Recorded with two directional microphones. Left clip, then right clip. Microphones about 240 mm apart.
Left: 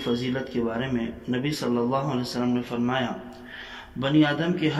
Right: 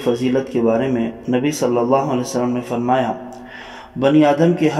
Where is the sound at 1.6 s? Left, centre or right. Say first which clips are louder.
Right 10 dB; right.